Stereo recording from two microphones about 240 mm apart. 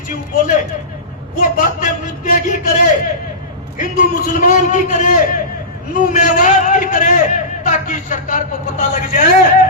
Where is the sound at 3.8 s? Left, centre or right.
Left.